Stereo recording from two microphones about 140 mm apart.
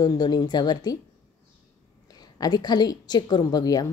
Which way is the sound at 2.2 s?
30° left (ahead or behind).